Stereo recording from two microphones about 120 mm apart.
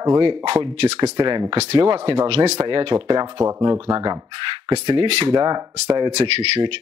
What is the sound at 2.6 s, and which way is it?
Speech, 40° right (ahead or behind).